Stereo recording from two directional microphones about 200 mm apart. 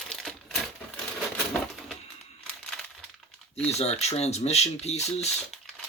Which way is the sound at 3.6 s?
30° left (ahead or behind).